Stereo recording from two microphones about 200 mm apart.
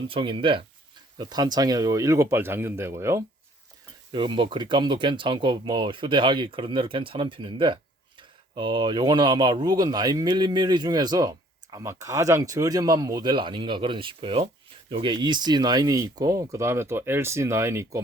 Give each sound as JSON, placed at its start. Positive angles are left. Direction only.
{"t": 0.1, "sound": "speech", "side_deg": -25}
{"t": 4.1, "sound": "speech", "side_deg": -25}